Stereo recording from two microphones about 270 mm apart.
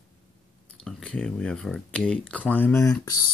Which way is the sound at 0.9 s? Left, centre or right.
Centre.